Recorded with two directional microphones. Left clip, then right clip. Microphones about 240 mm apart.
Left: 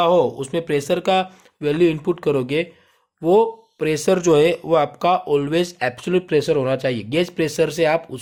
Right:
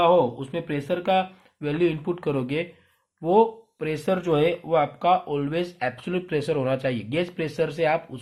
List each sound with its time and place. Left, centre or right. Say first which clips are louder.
0.0 s speech: left 3 dB; left